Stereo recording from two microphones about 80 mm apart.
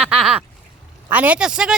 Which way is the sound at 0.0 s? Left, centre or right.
Centre.